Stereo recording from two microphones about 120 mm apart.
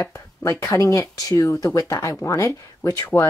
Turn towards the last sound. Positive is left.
turn(degrees=20)  # may be behind; listen again after turning